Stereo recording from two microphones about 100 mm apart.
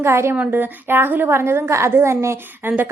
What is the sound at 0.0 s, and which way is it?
A woman's voice, 25° right (ahead or behind).